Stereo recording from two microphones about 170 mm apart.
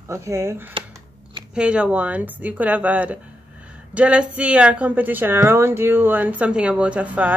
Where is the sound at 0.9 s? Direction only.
25° right (ahead or behind).